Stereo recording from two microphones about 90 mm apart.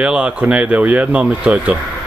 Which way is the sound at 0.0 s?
10° right (ahead or behind).